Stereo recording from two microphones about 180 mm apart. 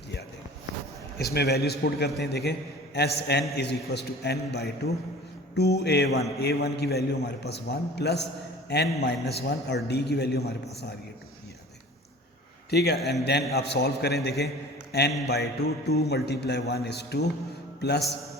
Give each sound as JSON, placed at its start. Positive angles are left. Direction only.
{"t": 1.2, "sound": "a man's voice", "side_deg": 60}
{"t": 12.7, "sound": "a man's voice", "side_deg": 65}